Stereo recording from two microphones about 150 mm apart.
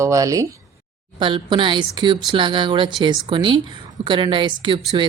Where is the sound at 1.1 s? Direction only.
30° right (ahead or behind).